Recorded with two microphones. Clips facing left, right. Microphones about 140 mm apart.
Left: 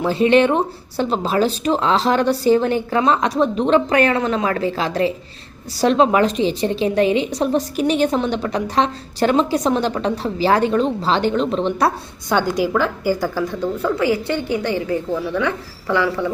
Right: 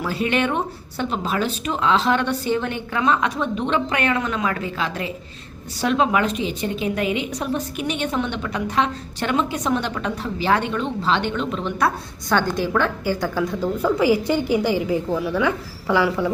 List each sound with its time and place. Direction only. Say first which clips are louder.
0.0 s a woman's voice: left 8 dB; 25° left (ahead or behind)
12.3 s a woman's voice: left 2 dB; 15° left (ahead or behind)
13.8 s a woman's voice: right 1 dB; 10° right (ahead or behind)